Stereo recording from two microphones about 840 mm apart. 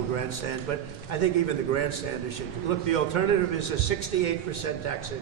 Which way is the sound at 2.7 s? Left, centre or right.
Left.